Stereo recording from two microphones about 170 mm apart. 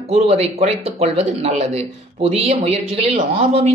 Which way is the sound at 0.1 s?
40° right (ahead or behind).